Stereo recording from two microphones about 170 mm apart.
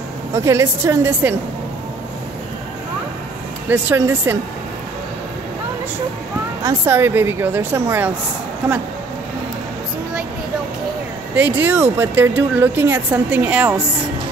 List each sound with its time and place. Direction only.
0.3 s speech: 15° right (ahead or behind)
3.6 s speech: 10° right (ahead or behind)
6.6 s speech: 15° right (ahead or behind)
11.3 s speech: 10° right (ahead or behind)